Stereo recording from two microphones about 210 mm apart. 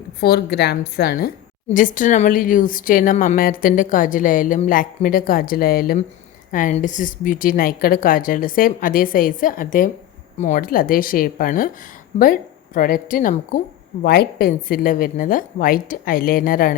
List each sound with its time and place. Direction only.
0.2 s a woman's voice: 50° left (ahead or behind)